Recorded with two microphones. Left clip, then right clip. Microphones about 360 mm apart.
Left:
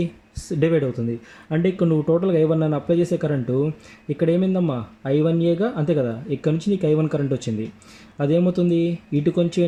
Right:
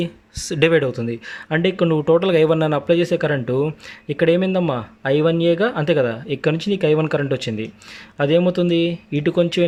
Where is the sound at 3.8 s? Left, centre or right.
Right.